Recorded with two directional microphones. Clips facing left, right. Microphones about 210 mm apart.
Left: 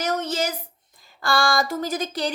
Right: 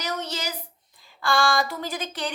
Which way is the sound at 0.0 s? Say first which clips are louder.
Left 6 dB; 50° left (ahead or behind).